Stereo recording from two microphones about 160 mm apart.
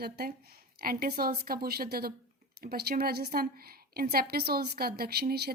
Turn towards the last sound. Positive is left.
turn(degrees=-70)  # may be behind; listen again after turning